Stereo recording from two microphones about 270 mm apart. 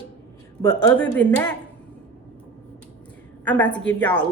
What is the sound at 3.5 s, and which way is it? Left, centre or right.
Speech, centre.